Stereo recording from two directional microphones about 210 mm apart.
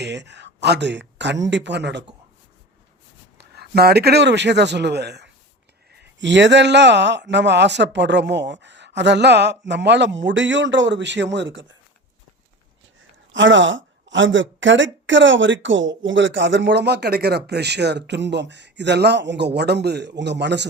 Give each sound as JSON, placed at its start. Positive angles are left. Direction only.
{"t": 0.0, "sound": "a man's voice", "side_deg": -55}
{"t": 3.3, "sound": "a man's voice", "side_deg": -50}
{"t": 13.3, "sound": "a woman's voice", "side_deg": -60}